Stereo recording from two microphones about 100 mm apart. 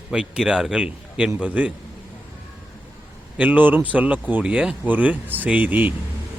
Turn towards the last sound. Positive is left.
turn(degrees=-15)  # may be behind; listen again after turning